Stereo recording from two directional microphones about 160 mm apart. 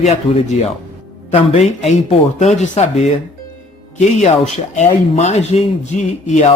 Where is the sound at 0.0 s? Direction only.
40° left (ahead or behind).